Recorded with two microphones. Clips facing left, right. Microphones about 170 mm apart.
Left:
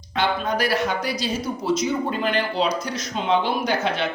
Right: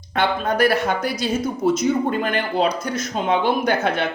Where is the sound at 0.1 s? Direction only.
55° right (ahead or behind).